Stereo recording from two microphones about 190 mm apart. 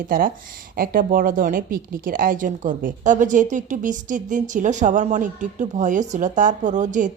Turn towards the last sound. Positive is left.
turn(degrees=-40)  # may be behind; listen again after turning